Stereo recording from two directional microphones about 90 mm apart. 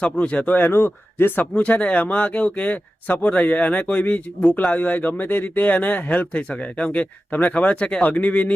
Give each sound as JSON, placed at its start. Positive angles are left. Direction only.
{"t": 0.0, "sound": "speech", "side_deg": 15}